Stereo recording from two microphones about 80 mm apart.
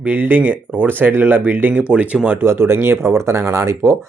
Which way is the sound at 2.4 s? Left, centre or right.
Right.